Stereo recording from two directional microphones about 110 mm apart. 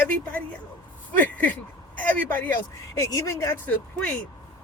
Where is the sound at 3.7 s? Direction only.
10° left (ahead or behind).